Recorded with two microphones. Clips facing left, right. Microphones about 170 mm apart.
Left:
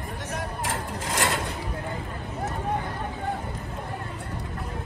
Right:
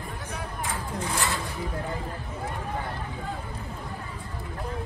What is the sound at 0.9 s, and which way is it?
Mechanisms, 90° left.